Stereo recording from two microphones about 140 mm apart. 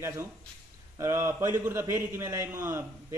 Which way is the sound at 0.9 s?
20° right (ahead or behind).